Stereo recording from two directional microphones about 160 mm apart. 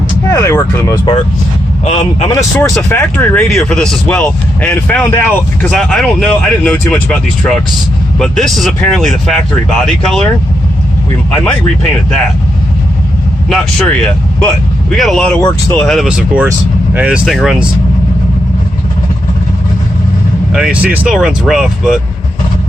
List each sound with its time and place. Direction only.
0.3 s speech: 20° left (ahead or behind)
1.8 s speech: 35° left (ahead or behind)
2.6 s speech: 15° left (ahead or behind)
13.5 s speech: 5° left (ahead or behind)
17.2 s speech: centre (ahead or behind)
20.5 s speech: 5° right (ahead or behind)